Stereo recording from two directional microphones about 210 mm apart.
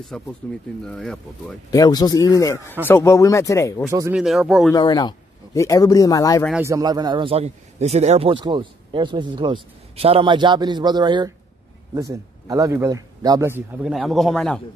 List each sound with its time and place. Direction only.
0.1 s speech: centre (ahead or behind)
1.7 s a man's voice: 15° left (ahead or behind)
3.9 s a man's voice: 15° right (ahead or behind)
4.2 s speech: centre (ahead or behind)
4.7 s a man's voice: 20° left (ahead or behind)
6.5 s a man's voice: 15° right (ahead or behind); by 14.6 s 5° left (ahead or behind)